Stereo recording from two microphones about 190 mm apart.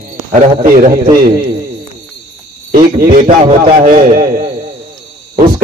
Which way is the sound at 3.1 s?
45° right (ahead or behind).